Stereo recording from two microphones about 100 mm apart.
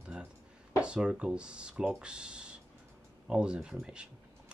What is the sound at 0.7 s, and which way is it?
Speech, 10° right (ahead or behind).